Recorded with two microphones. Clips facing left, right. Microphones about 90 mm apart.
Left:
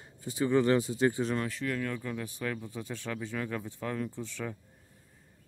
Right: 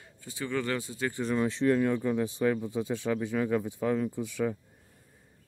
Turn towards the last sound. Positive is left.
turn(degrees=-10)  # may be behind; listen again after turning